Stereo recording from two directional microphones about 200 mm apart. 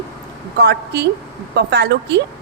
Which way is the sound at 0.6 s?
55° right (ahead or behind).